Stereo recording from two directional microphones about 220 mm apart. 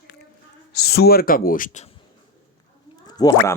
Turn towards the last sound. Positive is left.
turn(degrees=15)  # may be behind; listen again after turning